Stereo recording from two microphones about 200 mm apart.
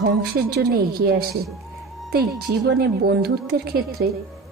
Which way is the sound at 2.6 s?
55° right (ahead or behind).